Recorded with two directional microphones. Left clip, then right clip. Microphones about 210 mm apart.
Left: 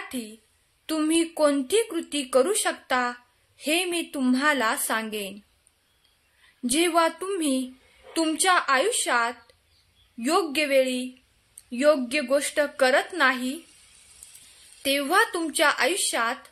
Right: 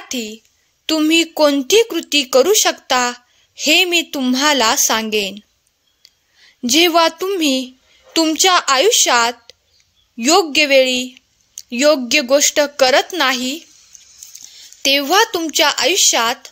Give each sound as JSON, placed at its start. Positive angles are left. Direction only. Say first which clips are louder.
{"t": 0.8, "sound": "speech", "louder": "right 10 dB", "side_deg": -40}
{"t": 6.6, "sound": "a woman's voice", "louder": "right 10 dB", "side_deg": -40}
{"t": 14.8, "sound": "speech", "louder": "right 9 dB", "side_deg": -40}